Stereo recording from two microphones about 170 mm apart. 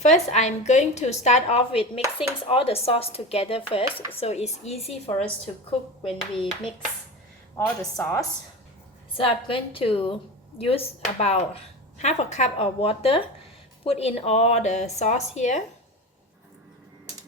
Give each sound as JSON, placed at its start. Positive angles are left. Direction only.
{"t": 0.0, "sound": "a woman's voice", "side_deg": 45}
{"t": 7.9, "sound": "a woman's voice", "side_deg": 10}
{"t": 9.1, "sound": "a woman's voice", "side_deg": 30}